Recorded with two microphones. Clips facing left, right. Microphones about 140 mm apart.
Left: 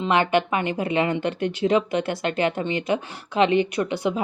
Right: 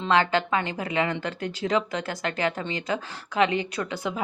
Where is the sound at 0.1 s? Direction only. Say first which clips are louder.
Left 1 dB; 20° left (ahead or behind).